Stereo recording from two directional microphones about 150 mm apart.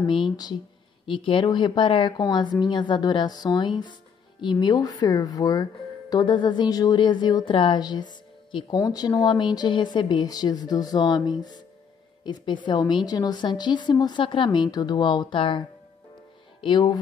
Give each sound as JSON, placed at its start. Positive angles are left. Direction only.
{"t": 0.0, "sound": "a woman's voice", "side_deg": 30}
{"t": 16.6, "sound": "a woman's voice", "side_deg": 30}